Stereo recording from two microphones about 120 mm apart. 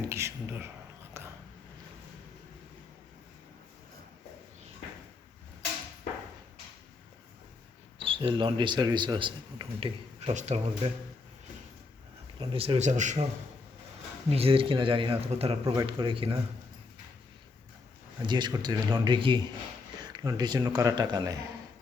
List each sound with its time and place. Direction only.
0.1 s a sound: 20° right (ahead or behind)
7.9 s speech: 50° right (ahead or behind)
10.2 s speech: 65° right (ahead or behind)
12.4 s speech: 45° right (ahead or behind)
12.8 s a man's voice: 90° right
14.3 s speech: 55° right (ahead or behind)
18.2 s speech: 40° right (ahead or behind)